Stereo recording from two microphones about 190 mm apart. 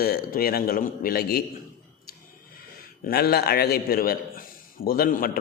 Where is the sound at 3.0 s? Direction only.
55° left (ahead or behind).